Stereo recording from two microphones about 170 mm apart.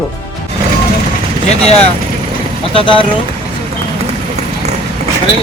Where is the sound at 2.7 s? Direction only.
30° left (ahead or behind).